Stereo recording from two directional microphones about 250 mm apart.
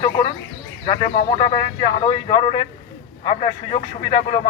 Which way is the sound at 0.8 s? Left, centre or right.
Left.